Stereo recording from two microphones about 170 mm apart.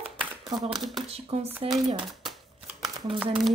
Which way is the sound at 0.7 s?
Centre (ahead or behind).